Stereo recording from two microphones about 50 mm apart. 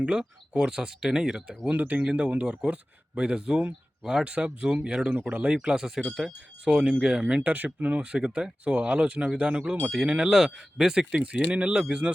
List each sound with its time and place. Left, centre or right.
0.0 s speech: centre
1.7 s speech: right
2.0 s speech: right
5.5 s speech: centre
7.5 s speech: right
10.2 s speech: centre